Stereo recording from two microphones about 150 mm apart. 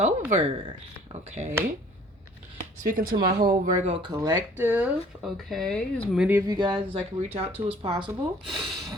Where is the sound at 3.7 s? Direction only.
55° right (ahead or behind).